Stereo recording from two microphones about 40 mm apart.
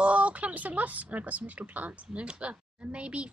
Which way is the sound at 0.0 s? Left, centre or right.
Right.